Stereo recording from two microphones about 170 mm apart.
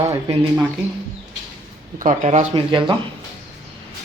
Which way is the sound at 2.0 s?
45° right (ahead or behind).